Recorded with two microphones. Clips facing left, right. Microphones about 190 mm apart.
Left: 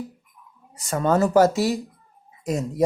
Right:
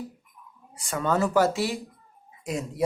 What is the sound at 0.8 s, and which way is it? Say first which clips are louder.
Speech: left 5 dB; 40° left (ahead or behind).